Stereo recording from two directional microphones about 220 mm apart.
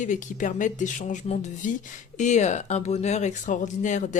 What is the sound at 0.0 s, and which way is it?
Speech, 35° left (ahead or behind).